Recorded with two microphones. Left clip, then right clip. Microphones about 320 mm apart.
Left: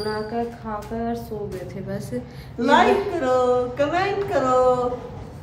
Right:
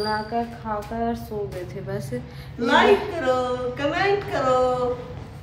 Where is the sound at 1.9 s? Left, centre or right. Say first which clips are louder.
Right 1 dB; centre.